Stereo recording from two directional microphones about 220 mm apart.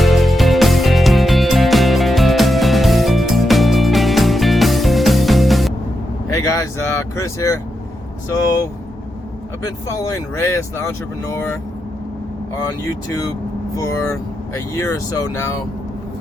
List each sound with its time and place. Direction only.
0.0 s music: centre (ahead or behind)
6.3 s speech: 15° left (ahead or behind)
9.6 s speech: 15° left (ahead or behind)
13.1 s speech: 15° left (ahead or behind)